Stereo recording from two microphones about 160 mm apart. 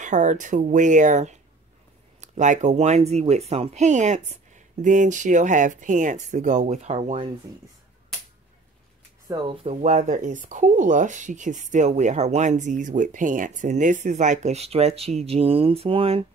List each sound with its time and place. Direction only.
0.0 s speech: 50° right (ahead or behind)
9.3 s speech: 35° right (ahead or behind)